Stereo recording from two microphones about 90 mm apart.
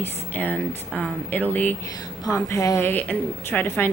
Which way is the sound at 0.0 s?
20° left (ahead or behind).